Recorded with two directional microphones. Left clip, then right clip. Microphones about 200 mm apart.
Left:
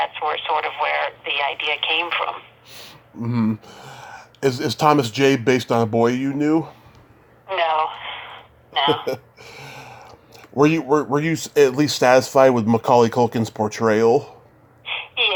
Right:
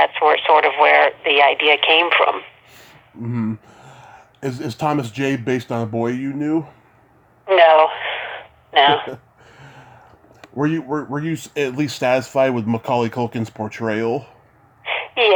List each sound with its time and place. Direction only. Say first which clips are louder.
0.0 s speech: right 8 dB; 25° right (ahead or behind)
2.7 s speech: left 3 dB; 5° left (ahead or behind)
7.4 s speech: right 9 dB; 25° right (ahead or behind)
9.0 s a sound: left 6 dB; 5° left (ahead or behind)
10.5 s speech: left 5 dB; 5° left (ahead or behind)
14.8 s a sound: right 3 dB; 25° right (ahead or behind)